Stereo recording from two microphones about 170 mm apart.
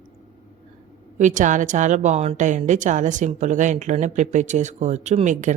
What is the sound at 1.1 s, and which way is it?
A woman's voice, 45° right (ahead or behind).